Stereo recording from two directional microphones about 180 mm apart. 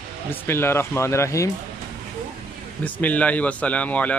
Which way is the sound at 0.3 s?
15° left (ahead or behind).